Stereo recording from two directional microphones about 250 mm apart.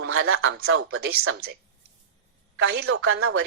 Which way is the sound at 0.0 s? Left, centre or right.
Right.